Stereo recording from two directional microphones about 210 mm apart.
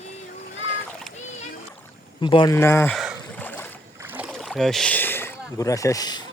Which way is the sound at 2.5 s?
10° left (ahead or behind).